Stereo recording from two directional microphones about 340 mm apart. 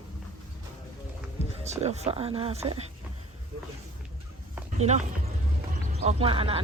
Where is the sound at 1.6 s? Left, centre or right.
Centre.